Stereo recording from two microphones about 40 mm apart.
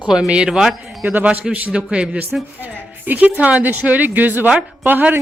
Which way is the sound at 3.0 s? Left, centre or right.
Right.